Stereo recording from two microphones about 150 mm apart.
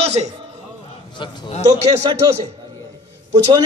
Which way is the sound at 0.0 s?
45° right (ahead or behind).